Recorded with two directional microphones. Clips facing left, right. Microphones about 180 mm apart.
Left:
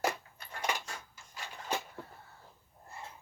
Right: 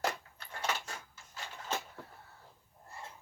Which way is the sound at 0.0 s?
10° left (ahead or behind).